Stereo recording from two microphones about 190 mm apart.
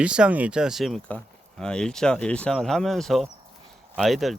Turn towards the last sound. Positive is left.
turn(degrees=0)  # may be behind; listen again after turning